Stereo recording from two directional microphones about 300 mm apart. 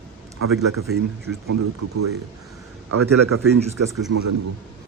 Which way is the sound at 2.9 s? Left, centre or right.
Right.